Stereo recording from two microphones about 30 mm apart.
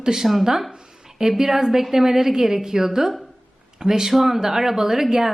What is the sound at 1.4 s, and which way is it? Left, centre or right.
A woman's voice, centre.